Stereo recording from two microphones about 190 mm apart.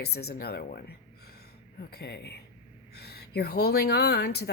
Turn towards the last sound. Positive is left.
turn(degrees=60)  # may be behind; listen again after turning